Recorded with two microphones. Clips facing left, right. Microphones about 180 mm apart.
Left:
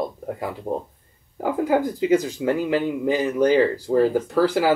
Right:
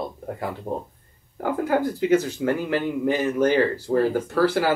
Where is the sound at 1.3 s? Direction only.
15° left (ahead or behind).